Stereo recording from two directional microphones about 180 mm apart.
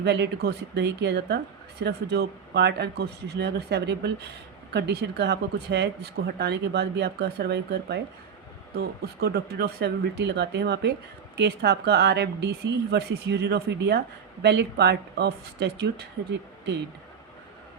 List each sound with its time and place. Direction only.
0.0 s speech: 65° right (ahead or behind)